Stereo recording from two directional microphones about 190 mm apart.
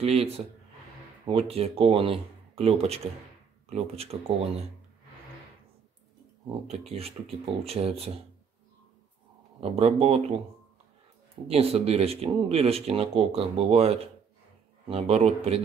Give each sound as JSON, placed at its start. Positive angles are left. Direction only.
{"t": 0.0, "sound": "speech", "side_deg": -30}
{"t": 6.9, "sound": "speech", "side_deg": -30}
{"t": 9.6, "sound": "speech", "side_deg": -30}
{"t": 11.4, "sound": "speech", "side_deg": -30}